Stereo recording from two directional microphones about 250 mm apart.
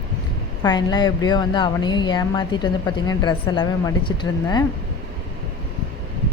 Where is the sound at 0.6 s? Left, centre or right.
Centre.